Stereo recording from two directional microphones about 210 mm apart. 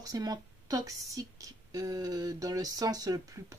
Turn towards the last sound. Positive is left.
turn(degrees=-15)  # may be behind; listen again after turning